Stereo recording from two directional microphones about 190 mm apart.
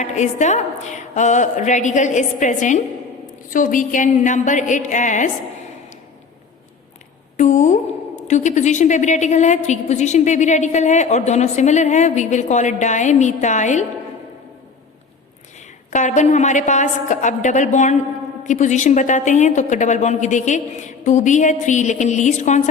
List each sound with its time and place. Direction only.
0.0 s a woman's voice: 40° left (ahead or behind)
7.3 s a woman's voice: 40° left (ahead or behind)
15.9 s a woman's voice: 40° left (ahead or behind)